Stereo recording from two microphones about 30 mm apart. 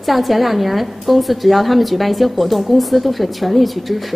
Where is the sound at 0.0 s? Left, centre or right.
Centre.